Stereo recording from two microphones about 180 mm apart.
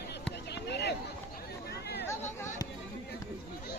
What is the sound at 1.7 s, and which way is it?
Chatter, 65° left (ahead or behind).